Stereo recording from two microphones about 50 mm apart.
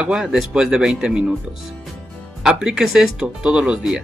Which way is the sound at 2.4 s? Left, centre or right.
Centre.